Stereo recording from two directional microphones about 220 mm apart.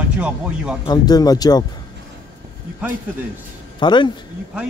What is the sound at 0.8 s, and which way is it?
Speech, 20° left (ahead or behind).